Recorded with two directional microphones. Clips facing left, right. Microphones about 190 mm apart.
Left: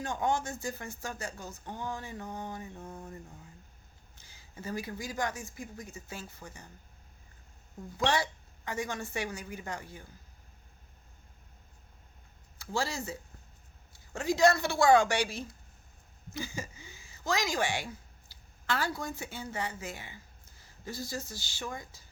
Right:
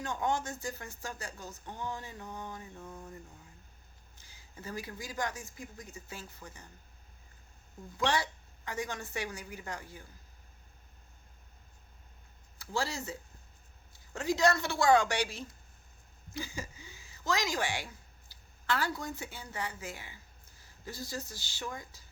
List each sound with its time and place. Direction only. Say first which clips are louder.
0.0 s speech: left 2 dB; 15° left (ahead or behind)
4.6 s speech: left 4 dB; 15° left (ahead or behind)
7.9 s speech: left 2 dB; 15° left (ahead or behind)
12.7 s speech: left 1 dB; 15° left (ahead or behind)
16.4 s a sound: left 2 dB; 15° left (ahead or behind)
17.0 s a woman's voice: left 1 dB; 15° left (ahead or behind)
21.2 s speech: left 1 dB; 15° right (ahead or behind)
21.6 s speech: left 1 dB; 15° left (ahead or behind)